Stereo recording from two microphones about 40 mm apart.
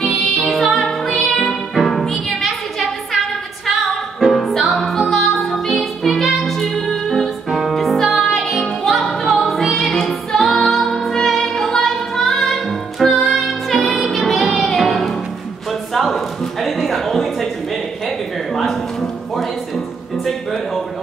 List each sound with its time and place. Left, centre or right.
0.4 s music: centre
4.2 s music: centre
9.8 s music: centre
10.0 s music: centre
15.9 s a sound: centre
18.6 s music: centre